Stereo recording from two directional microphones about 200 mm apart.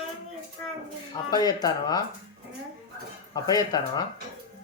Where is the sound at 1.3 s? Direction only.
20° left (ahead or behind).